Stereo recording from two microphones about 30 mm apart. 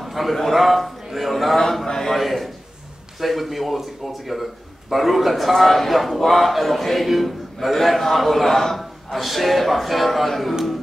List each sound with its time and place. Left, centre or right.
0.0 s a man's voice: centre
1.9 s a man's voice: centre
2.1 s speech: centre